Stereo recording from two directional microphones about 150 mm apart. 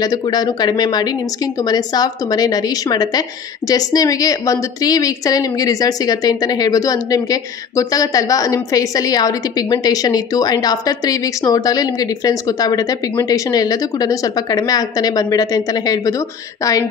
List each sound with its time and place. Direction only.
0.0 s a woman's voice: 25° left (ahead or behind)